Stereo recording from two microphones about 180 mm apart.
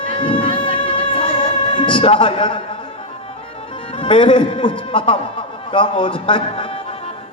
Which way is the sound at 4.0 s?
30° left (ahead or behind).